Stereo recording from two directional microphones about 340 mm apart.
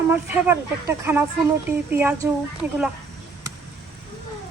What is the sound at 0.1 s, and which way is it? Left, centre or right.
A woman's voice, centre.